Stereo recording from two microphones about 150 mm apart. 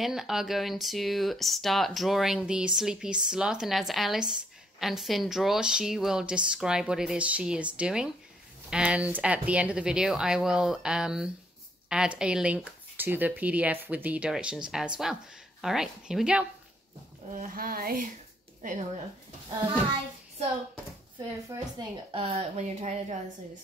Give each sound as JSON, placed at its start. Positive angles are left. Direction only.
{"t": 0.0, "sound": "speech", "side_deg": 0}
{"t": 17.4, "sound": "speech", "side_deg": -75}
{"t": 18.6, "sound": "a woman's voice", "side_deg": -60}
{"t": 21.5, "sound": "speech", "side_deg": -20}
{"t": 22.1, "sound": "speech", "side_deg": -40}